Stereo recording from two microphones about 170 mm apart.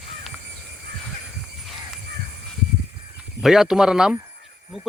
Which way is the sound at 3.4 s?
5° right (ahead or behind).